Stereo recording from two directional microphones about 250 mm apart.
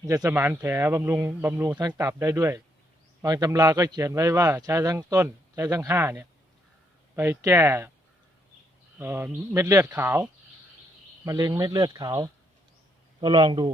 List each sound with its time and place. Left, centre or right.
0.0 s speech: centre
9.0 s speech: centre
11.3 s a man's voice: centre